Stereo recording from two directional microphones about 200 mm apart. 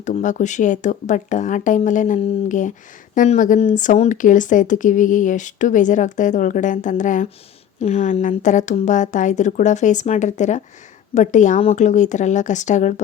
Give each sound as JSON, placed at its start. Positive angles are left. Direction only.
{"t": 0.0, "sound": "speech", "side_deg": 40}